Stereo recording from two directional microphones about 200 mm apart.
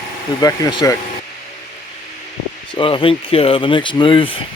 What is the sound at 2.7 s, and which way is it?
Speech, 25° left (ahead or behind).